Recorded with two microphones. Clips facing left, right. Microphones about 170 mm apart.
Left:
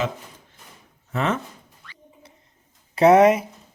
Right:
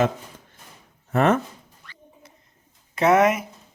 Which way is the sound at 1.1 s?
50° right (ahead or behind).